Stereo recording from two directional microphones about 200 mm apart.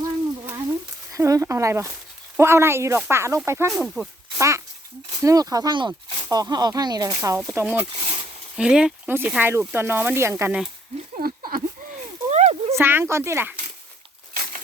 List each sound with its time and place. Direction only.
1.1 s speech: 15° right (ahead or behind)
3.7 s speech: centre (ahead or behind)
4.4 s speech: 15° right (ahead or behind)
11.2 s a sound: 45° right (ahead or behind)
12.3 s a sound: 30° right (ahead or behind)
12.7 s speech: 10° right (ahead or behind)